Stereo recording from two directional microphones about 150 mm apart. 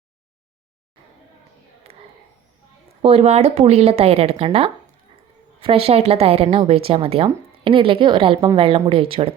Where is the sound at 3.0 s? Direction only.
40° right (ahead or behind).